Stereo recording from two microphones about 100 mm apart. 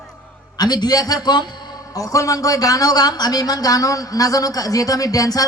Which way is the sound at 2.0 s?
35° left (ahead or behind).